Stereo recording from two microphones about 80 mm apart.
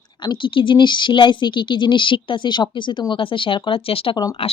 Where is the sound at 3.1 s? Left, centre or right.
Left.